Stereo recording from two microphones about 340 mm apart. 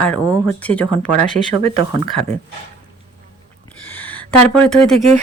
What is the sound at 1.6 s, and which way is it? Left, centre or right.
Speech, centre.